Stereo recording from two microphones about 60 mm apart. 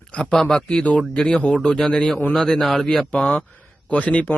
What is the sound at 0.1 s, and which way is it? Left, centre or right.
Speech, centre.